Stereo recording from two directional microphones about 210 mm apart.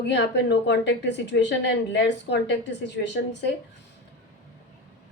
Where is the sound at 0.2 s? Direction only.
50° left (ahead or behind).